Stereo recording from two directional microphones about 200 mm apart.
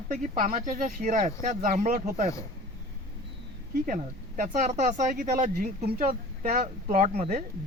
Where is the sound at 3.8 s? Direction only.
40° right (ahead or behind).